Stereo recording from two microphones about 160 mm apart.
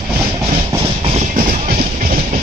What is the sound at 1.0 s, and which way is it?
Music, 40° right (ahead or behind).